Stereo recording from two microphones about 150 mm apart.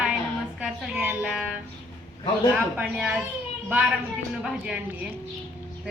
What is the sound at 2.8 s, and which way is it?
Speech, 5° right (ahead or behind).